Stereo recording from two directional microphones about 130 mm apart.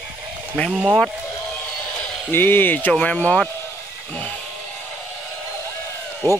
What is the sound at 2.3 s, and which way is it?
Speech, 15° left (ahead or behind).